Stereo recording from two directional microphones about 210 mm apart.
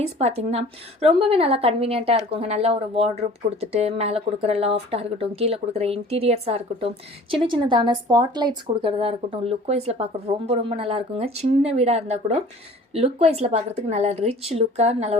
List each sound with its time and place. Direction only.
0.0 s a woman's voice: 30° right (ahead or behind)